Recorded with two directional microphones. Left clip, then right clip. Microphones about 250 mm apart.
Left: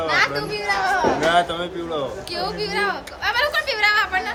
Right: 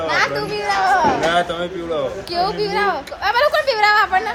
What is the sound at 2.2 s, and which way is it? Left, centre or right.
A woman's voice, centre.